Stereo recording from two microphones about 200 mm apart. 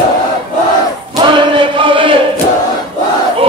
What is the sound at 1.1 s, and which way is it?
Chant, 25° right (ahead or behind).